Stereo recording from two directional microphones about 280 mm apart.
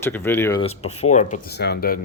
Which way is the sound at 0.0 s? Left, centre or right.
Centre.